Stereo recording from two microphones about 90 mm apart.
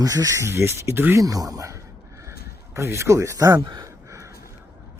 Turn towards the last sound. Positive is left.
turn(degrees=-40)  # may be behind; listen again after turning